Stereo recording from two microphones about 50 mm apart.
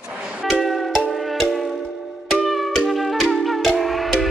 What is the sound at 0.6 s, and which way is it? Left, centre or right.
Music, centre.